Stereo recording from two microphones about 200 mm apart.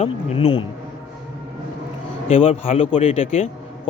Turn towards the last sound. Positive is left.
turn(degrees=30)  # may be behind; listen again after turning